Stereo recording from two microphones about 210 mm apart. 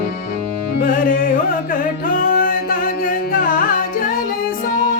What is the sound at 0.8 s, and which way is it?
Music, 40° left (ahead or behind).